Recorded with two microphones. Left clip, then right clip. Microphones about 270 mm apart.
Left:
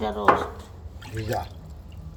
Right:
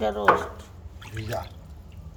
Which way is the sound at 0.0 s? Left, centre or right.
Centre.